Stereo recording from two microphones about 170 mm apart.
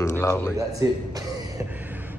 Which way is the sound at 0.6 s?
20° right (ahead or behind).